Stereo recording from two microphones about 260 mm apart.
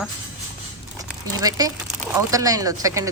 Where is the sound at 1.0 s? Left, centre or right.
Centre.